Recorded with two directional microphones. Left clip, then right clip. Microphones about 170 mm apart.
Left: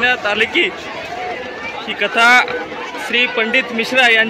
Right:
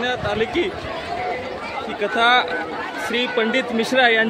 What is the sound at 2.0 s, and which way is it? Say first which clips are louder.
Speech: left 6 dB; 5° right (ahead or behind).